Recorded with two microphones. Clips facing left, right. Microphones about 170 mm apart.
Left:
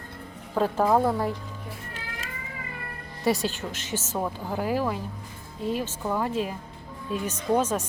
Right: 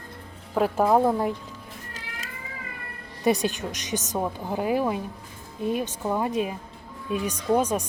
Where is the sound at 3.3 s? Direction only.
15° right (ahead or behind).